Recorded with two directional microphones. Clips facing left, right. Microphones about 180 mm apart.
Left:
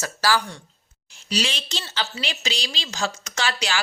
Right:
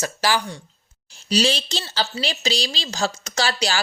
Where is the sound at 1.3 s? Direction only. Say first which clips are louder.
Right 6 dB; 35° right (ahead or behind).